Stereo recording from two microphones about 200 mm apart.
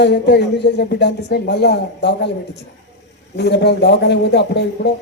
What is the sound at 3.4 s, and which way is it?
Speech, 60° left (ahead or behind).